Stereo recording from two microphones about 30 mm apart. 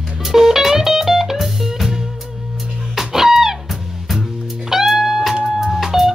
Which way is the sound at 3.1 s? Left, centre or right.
Centre.